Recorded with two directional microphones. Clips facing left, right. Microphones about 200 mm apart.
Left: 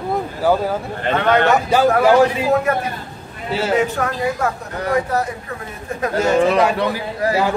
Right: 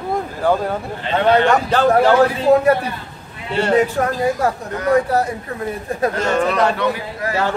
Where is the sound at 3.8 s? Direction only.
35° right (ahead or behind).